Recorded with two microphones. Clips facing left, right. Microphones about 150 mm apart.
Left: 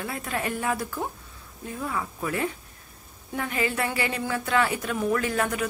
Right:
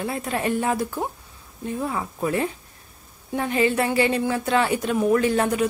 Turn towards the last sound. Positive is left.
turn(degrees=-25)  # may be behind; listen again after turning